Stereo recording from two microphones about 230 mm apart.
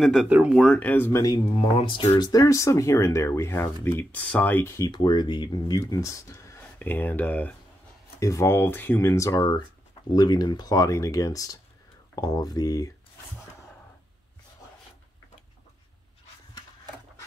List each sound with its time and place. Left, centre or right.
0.0 s speech: centre